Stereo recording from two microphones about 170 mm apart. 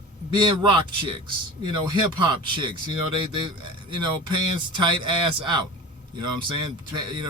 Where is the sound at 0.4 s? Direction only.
30° right (ahead or behind).